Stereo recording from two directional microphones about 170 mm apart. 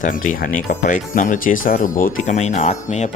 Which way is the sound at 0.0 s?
50° left (ahead or behind).